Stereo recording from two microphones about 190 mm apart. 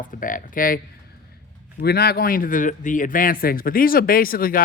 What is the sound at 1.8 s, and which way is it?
A man's voice, 55° left (ahead or behind).